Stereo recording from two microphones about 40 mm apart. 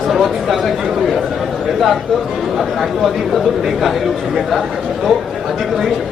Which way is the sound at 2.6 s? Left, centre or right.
Centre.